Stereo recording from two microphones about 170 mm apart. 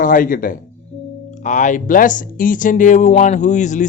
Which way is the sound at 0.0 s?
55° left (ahead or behind).